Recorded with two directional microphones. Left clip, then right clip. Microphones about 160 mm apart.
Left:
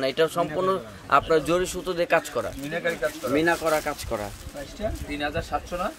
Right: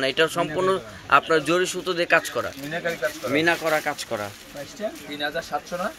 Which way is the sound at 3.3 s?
5° right (ahead or behind).